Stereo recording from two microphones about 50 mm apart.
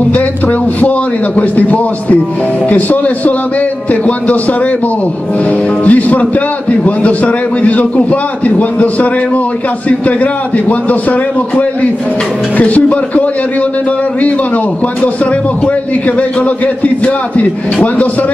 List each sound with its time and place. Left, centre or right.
0.5 s a man's voice: left
5.9 s a man's voice: left
7.6 s a man's voice: left
10.7 s a man's voice: left